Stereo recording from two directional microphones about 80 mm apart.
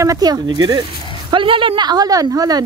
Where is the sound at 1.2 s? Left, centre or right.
Right.